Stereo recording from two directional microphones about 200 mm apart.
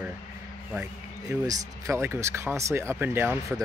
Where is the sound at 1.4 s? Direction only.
15° right (ahead or behind).